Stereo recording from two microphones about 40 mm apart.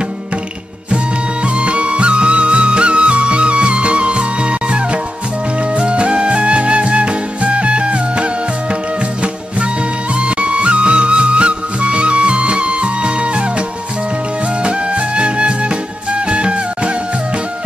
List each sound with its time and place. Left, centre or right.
0.9 s music: right
10.1 s music: right